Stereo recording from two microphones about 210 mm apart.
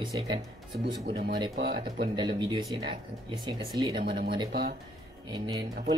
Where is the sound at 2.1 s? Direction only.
20° right (ahead or behind).